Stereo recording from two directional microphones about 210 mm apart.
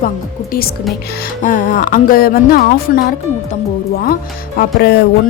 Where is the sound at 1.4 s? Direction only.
40° left (ahead or behind).